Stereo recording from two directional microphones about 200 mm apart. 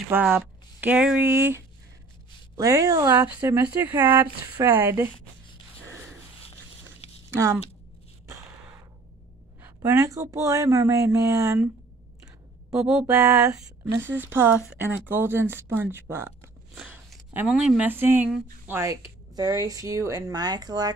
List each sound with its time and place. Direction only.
0.1 s speech: 10° right (ahead or behind)
7.2 s speech: 10° right (ahead or behind)
8.3 s a sound: 15° right (ahead or behind)
9.6 s speech: 15° right (ahead or behind)
12.7 s speech: 5° right (ahead or behind); by 20.9 s 20° right (ahead or behind)